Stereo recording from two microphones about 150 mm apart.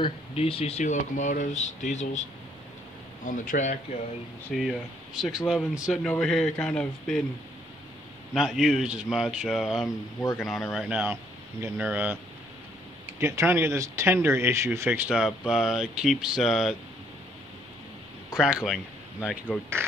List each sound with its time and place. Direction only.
0.0 s speech: 40° left (ahead or behind)
3.3 s speech: 60° left (ahead or behind)
4.6 s speech: centre (ahead or behind)
8.4 s speech: 5° right (ahead or behind)
13.2 s speech: 15° right (ahead or behind); by 16.7 s centre (ahead or behind)
18.4 s speech: 5° right (ahead or behind)